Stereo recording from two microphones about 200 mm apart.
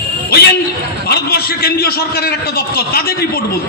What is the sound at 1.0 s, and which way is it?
A man's voice, 55° left (ahead or behind).